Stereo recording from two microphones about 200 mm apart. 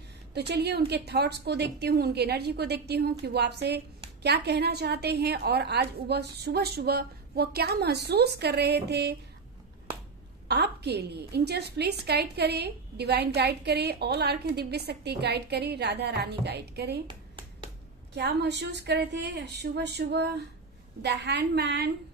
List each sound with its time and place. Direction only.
0.3 s a woman's voice: 55° right (ahead or behind)
10.5 s a woman's voice: 55° right (ahead or behind)
17.1 s a sound: 25° right (ahead or behind)
18.1 s a woman's voice: 55° right (ahead or behind)